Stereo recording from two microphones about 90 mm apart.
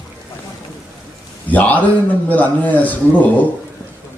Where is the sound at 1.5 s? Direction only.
15° left (ahead or behind).